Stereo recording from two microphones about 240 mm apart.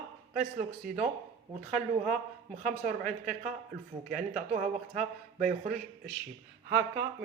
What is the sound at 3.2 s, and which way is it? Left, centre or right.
A woman's voice, right.